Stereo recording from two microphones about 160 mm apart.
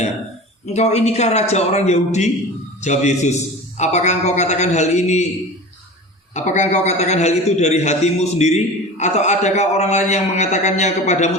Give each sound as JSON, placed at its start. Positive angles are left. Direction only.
{"t": 0.6, "sound": "a man's voice", "side_deg": 45}
{"t": 6.3, "sound": "a man's voice", "side_deg": 50}